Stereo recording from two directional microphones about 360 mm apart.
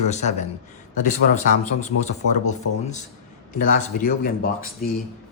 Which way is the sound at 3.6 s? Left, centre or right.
Left.